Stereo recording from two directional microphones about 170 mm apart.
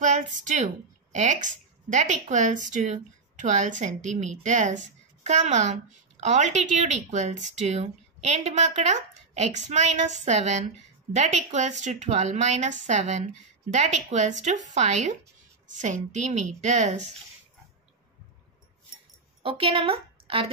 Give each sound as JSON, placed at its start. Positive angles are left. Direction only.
{"t": 0.0, "sound": "a woman's voice", "side_deg": -45}
{"t": 19.4, "sound": "a woman's voice", "side_deg": -35}